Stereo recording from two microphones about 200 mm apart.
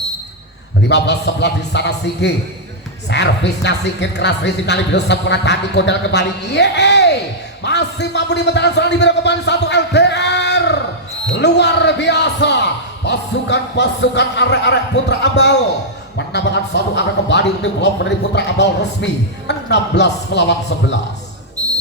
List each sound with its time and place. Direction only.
0.9 s a man's voice: 60° left (ahead or behind)
21.6 s basketball bounce: 20° right (ahead or behind)